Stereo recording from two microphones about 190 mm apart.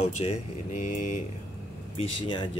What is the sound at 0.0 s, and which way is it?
A man's voice, 35° left (ahead or behind).